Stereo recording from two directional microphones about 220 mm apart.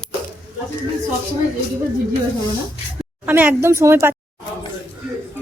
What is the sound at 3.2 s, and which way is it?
Speech, 10° right (ahead or behind).